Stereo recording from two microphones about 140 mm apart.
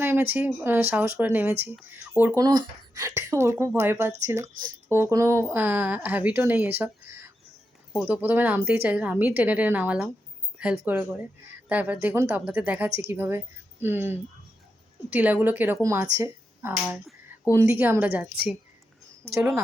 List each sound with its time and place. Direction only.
0.0 s speech: 15° right (ahead or behind)
2.4 s speech: 30° right (ahead or behind); by 18.3 s 10° right (ahead or behind)